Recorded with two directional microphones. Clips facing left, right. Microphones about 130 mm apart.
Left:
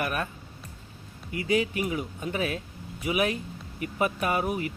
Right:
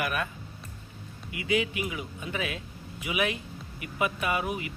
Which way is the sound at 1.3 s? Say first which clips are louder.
Left 2 dB; 40° left (ahead or behind).